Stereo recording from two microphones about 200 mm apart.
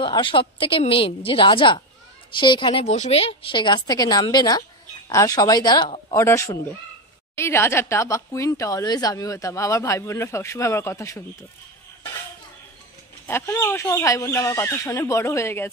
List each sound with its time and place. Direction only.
0.0 s a woman's voice: 25° left (ahead or behind)
13.3 s a woman's voice: 15° left (ahead or behind)